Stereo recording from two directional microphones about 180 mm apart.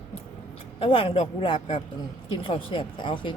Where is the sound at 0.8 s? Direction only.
30° left (ahead or behind).